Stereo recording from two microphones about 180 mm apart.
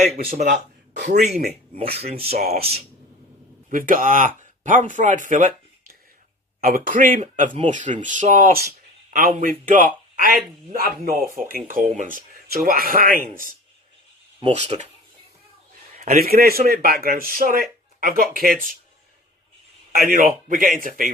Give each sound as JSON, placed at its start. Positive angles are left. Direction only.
{"t": 0.3, "sound": "speech", "side_deg": -50}
{"t": 1.4, "sound": "speech", "side_deg": -60}
{"t": 1.8, "sound": "speech", "side_deg": -35}
{"t": 3.7, "sound": "speech", "side_deg": -50}
{"t": 6.6, "sound": "speech", "side_deg": -50}
{"t": 14.4, "sound": "speech", "side_deg": -35}
{"t": 16.0, "sound": "speech", "side_deg": -50}
{"t": 19.9, "sound": "speech", "side_deg": -55}